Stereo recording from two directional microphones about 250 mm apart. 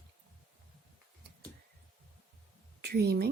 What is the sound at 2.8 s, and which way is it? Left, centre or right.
Speech, right.